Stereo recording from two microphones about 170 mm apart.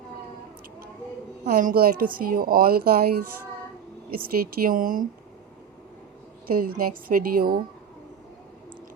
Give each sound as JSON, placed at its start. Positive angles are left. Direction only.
{"t": 1.5, "sound": "a woman's voice", "side_deg": -55}
{"t": 4.1, "sound": "a woman's voice", "side_deg": -60}
{"t": 6.5, "sound": "a woman's voice", "side_deg": -60}